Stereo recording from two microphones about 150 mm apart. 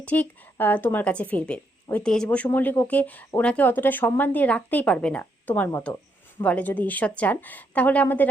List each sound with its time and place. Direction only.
0.0 s a woman's voice: 10° left (ahead or behind)